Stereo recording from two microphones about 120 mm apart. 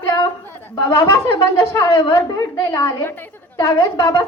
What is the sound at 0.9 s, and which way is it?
Speech, 25° left (ahead or behind).